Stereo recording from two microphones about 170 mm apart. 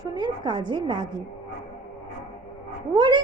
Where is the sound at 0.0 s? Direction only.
25° right (ahead or behind).